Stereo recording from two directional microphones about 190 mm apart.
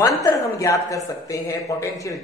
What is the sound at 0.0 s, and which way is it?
A woman's voice, 15° left (ahead or behind).